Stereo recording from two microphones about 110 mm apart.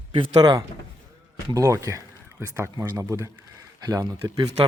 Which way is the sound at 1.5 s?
25° right (ahead or behind).